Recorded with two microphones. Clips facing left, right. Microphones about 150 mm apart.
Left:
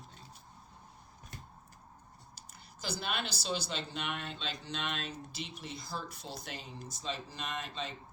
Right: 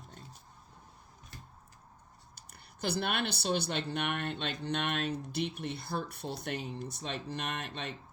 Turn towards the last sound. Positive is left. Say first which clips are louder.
# right 1 dB
turn(degrees=-60)  # may be behind; listen again after turning